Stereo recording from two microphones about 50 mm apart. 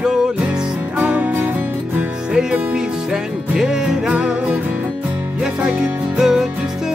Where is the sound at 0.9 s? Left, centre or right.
Right.